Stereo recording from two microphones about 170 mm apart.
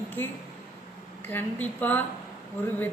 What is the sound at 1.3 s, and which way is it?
Speech, 10° left (ahead or behind).